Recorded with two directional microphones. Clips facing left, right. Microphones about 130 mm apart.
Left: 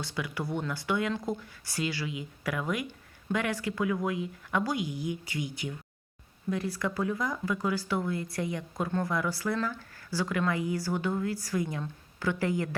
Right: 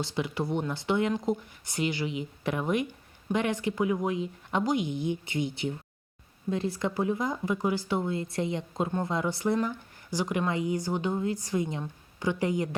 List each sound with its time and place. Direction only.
0.0 s speech: 25° right (ahead or behind)